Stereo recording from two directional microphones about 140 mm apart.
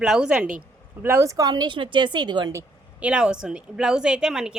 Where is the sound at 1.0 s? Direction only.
20° right (ahead or behind).